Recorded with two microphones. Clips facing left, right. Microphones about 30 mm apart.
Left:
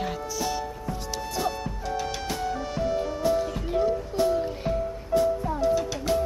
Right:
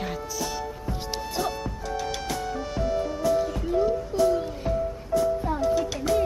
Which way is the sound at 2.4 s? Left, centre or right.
Centre.